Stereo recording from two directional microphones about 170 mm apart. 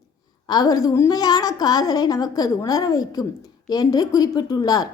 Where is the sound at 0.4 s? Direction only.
25° left (ahead or behind).